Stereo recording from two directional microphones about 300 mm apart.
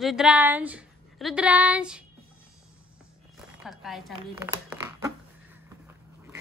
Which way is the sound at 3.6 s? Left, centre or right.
Centre.